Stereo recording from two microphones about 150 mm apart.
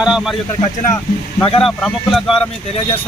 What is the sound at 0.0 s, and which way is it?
Speech, 5° right (ahead or behind).